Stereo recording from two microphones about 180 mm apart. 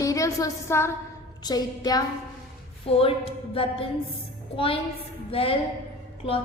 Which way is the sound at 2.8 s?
30° left (ahead or behind).